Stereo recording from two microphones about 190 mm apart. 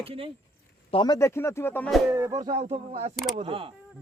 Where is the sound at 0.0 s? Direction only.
30° right (ahead or behind).